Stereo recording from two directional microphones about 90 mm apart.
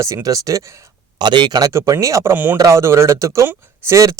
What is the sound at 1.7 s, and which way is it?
Speech, 35° right (ahead or behind).